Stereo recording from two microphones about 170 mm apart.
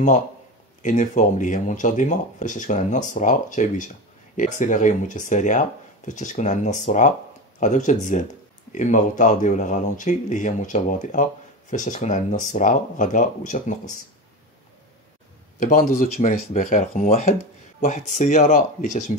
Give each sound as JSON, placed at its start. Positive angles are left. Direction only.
{"t": 0.8, "sound": "speech", "side_deg": 45}
{"t": 15.6, "sound": "speech", "side_deg": 55}